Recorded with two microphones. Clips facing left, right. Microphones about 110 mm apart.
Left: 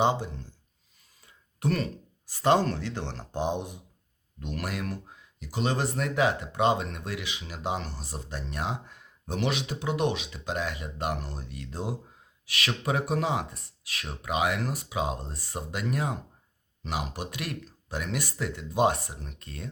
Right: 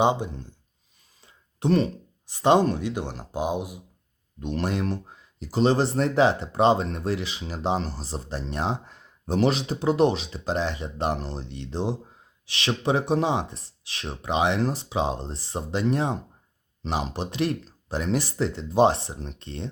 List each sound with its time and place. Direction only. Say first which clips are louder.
0.0 s speech: right 3 dB; 20° right (ahead or behind)
4.4 s speech: right 7 dB; 25° right (ahead or behind)